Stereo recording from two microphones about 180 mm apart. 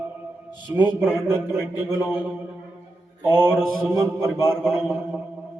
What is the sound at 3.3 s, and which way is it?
A man's voice, 15° right (ahead or behind).